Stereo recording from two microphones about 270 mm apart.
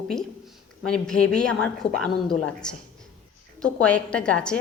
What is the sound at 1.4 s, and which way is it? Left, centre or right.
A woman's voice, centre.